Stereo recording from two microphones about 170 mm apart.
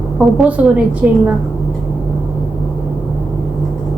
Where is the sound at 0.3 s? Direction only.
5° right (ahead or behind).